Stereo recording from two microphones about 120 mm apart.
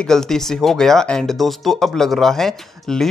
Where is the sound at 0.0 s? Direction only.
5° left (ahead or behind).